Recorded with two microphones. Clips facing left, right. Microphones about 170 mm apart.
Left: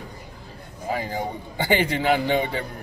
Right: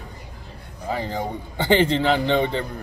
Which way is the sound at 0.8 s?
10° left (ahead or behind).